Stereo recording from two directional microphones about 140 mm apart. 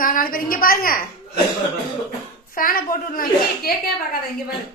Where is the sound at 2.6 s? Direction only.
90° left.